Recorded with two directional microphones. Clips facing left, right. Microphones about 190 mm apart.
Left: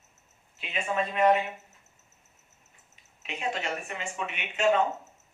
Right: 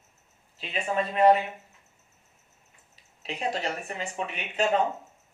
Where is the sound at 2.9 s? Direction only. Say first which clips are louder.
Right 3 dB; 35° right (ahead or behind).